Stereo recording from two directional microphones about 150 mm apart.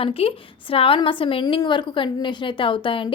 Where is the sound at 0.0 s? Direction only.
40° left (ahead or behind).